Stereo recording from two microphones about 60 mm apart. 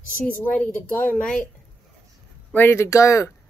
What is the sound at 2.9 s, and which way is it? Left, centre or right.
Speech, left.